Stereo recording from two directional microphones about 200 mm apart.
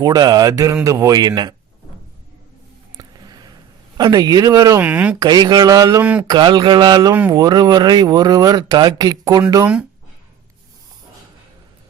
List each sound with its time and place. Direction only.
0.0 s speech: 20° right (ahead or behind)
3.0 s a sound: 20° right (ahead or behind)
3.9 s speech: 20° right (ahead or behind)
5.2 s speech: 20° right (ahead or behind)
6.0 s speech: 5° right (ahead or behind)
6.2 s speech: 20° right (ahead or behind)